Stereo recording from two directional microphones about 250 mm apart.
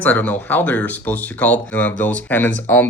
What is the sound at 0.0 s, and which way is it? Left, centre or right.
Speech, centre.